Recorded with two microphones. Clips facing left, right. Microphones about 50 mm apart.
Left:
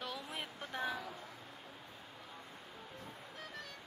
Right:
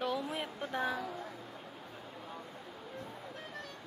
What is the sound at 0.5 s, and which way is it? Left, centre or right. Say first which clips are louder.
Speech: right 4 dB; centre.